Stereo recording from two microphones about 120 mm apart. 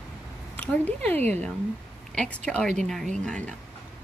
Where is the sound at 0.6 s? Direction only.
10° left (ahead or behind).